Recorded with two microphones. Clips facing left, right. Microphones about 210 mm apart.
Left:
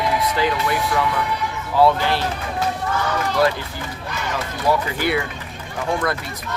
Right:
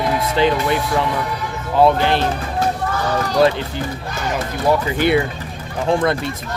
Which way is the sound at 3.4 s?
25° right (ahead or behind).